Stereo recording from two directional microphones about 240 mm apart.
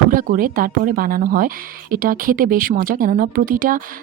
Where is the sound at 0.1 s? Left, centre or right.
Right.